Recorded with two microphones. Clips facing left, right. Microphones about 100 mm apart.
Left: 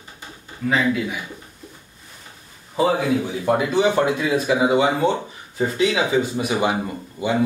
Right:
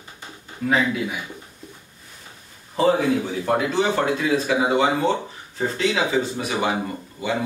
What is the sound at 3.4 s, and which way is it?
Speech, 15° left (ahead or behind).